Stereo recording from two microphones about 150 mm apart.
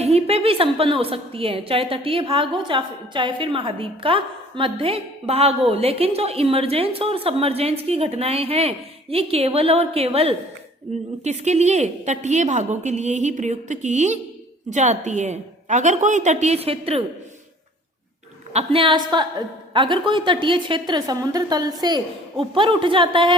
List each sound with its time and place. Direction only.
0.0 s a woman's voice: 40° right (ahead or behind)
18.5 s a woman's voice: 35° right (ahead or behind)